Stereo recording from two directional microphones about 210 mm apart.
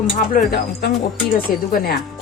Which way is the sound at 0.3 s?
50° left (ahead or behind).